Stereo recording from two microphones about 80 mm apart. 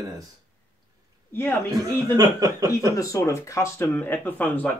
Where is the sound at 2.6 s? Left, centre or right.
Left.